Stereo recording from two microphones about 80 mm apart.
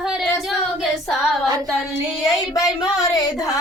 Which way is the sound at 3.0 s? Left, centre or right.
Left.